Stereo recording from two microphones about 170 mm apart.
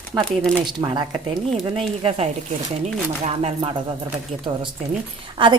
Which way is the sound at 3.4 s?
40° right (ahead or behind).